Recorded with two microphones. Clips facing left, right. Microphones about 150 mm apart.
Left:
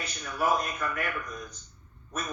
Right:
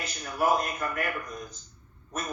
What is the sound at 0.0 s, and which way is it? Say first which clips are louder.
Speech: right 2 dB; 30° right (ahead or behind).